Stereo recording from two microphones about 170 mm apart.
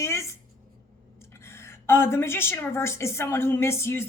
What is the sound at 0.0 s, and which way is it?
Writing, 15° left (ahead or behind).